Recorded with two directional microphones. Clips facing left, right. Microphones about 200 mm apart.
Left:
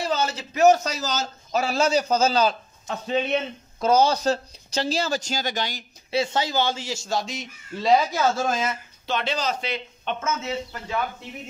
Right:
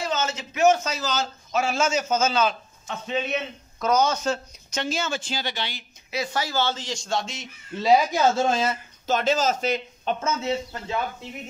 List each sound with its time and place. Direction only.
0.0 s a man's voice: 35° left (ahead or behind)
6.1 s a man's voice: 25° left (ahead or behind); by 8.1 s 5° right (ahead or behind)
8.1 s speech: 25° right (ahead or behind)